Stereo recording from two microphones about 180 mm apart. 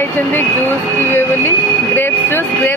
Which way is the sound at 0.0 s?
10° left (ahead or behind).